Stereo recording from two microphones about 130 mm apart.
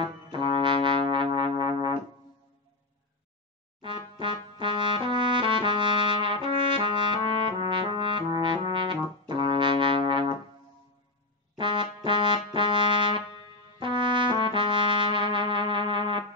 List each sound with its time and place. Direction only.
0.0 s brass instrument: 40° right (ahead or behind)
3.8 s music: 40° right (ahead or behind)
11.5 s brass instrument: 40° right (ahead or behind)
13.7 s trumpet: 40° right (ahead or behind)
15.1 s music: 40° right (ahead or behind)